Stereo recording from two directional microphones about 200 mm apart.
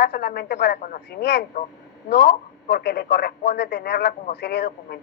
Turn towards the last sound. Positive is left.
turn(degrees=55)  # may be behind; listen again after turning